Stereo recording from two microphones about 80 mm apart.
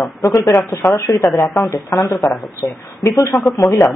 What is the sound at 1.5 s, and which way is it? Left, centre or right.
Speech, left.